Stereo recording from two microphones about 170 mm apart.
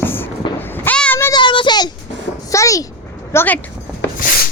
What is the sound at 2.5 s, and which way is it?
A child's voice, 20° left (ahead or behind).